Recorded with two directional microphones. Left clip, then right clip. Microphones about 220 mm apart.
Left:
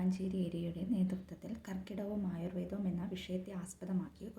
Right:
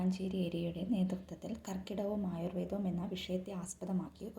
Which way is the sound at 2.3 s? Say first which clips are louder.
Right 3 dB; 15° left (ahead or behind).